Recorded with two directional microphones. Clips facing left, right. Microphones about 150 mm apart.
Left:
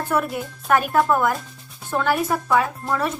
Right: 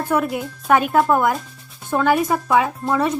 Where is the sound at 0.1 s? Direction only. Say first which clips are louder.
Right 3 dB; 5° right (ahead or behind).